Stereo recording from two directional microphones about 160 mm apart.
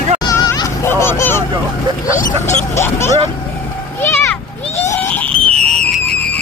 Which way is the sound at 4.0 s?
15° left (ahead or behind).